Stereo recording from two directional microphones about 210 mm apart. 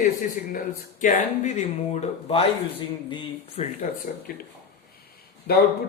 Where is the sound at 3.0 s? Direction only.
25° left (ahead or behind).